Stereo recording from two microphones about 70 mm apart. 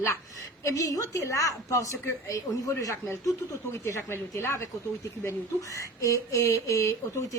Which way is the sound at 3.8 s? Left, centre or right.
Left.